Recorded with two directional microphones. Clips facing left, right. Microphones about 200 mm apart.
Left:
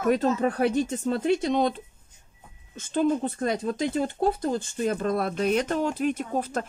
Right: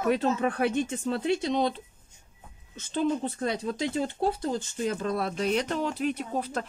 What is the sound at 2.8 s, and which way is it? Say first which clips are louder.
Speech: left 3 dB; 50° left (ahead or behind).